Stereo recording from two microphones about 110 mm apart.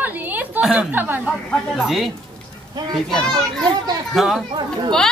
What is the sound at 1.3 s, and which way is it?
A man's voice, centre (ahead or behind).